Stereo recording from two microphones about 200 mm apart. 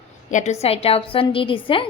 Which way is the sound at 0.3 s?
35° left (ahead or behind).